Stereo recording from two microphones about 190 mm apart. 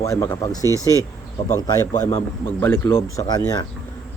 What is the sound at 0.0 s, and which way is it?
Speech, 15° left (ahead or behind).